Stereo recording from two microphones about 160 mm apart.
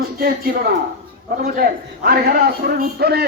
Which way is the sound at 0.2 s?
70° right (ahead or behind).